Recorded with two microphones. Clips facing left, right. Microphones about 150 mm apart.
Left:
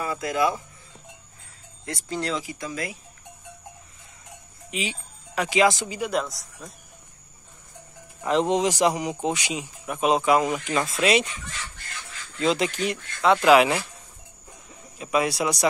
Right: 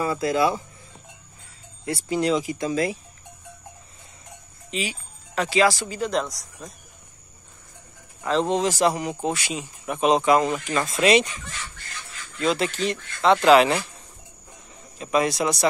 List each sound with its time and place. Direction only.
0.0 s speech: 30° right (ahead or behind)
1.9 s speech: 10° right (ahead or behind); by 3.0 s 25° right (ahead or behind)
4.6 s speech: 15° left (ahead or behind)
8.2 s speech: 15° left (ahead or behind)
10.9 s speech: 5° left (ahead or behind)
12.4 s speech: 20° left (ahead or behind)
15.0 s speech: 10° left (ahead or behind)